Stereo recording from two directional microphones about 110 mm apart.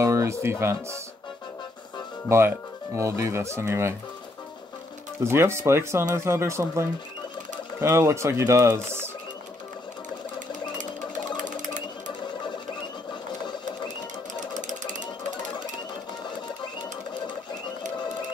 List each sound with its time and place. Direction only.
0.0 s speech: 25° right (ahead or behind)
2.2 s speech: 25° right (ahead or behind)
5.2 s speech: 25° right (ahead or behind)